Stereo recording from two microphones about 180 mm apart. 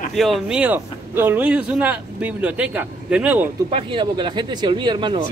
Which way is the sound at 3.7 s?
30° right (ahead or behind).